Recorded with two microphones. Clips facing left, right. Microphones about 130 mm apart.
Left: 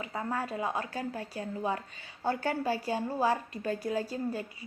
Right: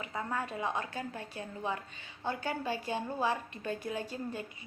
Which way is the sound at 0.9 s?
20° right (ahead or behind).